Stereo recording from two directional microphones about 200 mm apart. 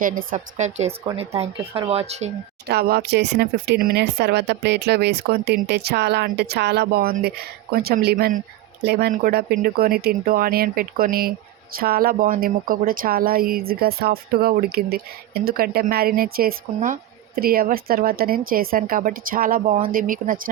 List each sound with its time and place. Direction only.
0.0 s a woman's voice: 45° right (ahead or behind)
2.6 s speech: 50° right (ahead or behind)